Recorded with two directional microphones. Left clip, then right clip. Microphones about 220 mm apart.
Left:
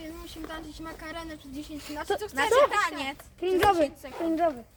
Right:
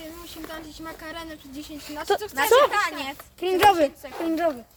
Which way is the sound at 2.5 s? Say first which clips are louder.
Right 4 dB; 45° right (ahead or behind).